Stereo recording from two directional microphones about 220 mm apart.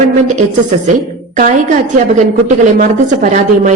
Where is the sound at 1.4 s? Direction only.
35° right (ahead or behind).